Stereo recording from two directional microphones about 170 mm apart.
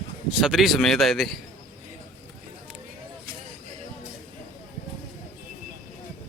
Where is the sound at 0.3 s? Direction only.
5° right (ahead or behind).